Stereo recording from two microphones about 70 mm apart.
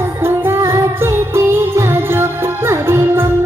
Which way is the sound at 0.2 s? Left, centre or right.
Right.